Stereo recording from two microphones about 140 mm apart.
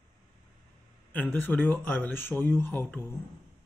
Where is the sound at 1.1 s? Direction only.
15° left (ahead or behind).